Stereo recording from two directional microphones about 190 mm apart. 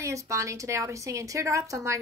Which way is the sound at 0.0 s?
15° right (ahead or behind).